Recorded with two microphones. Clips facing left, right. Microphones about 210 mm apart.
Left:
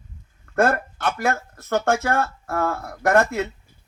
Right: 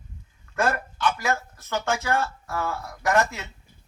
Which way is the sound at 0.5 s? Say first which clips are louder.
Left 5 dB; 55° left (ahead or behind).